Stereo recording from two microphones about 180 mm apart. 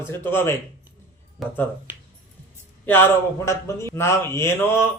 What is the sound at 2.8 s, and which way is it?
Speech, 10° left (ahead or behind).